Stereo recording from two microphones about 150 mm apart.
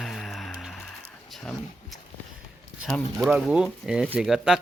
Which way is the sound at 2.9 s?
Centre (ahead or behind).